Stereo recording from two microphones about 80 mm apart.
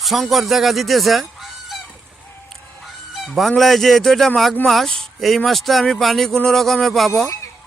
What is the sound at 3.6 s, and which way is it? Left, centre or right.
Speech, centre.